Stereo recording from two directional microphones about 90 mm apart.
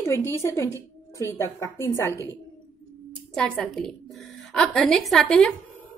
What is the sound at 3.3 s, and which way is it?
A woman's voice, 5° left (ahead or behind).